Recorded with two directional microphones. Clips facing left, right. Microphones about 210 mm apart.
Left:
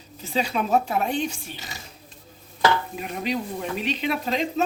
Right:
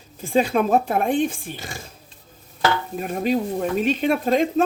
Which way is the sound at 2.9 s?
45° right (ahead or behind).